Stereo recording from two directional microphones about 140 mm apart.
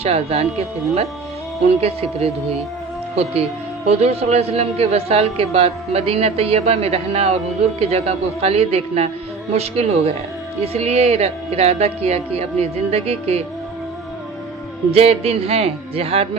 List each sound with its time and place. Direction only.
0.0 s a man's voice: 45° right (ahead or behind)
1.8 s a man's voice: 45° right (ahead or behind)
3.8 s a man's voice: 50° right (ahead or behind)
14.9 s a man's voice: 45° right (ahead or behind)